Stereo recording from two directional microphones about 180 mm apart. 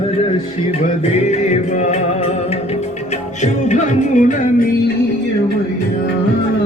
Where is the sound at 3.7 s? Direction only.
45° left (ahead or behind).